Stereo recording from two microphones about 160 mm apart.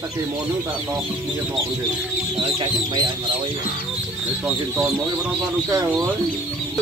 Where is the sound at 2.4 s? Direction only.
30° right (ahead or behind).